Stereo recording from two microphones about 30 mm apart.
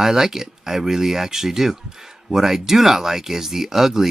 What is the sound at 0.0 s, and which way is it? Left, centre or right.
Speech, centre.